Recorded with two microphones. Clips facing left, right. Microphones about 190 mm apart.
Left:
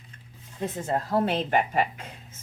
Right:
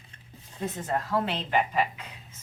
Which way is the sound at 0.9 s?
40° left (ahead or behind).